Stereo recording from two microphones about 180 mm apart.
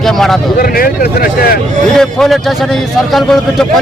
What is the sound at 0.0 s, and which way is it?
Speech, centre (ahead or behind).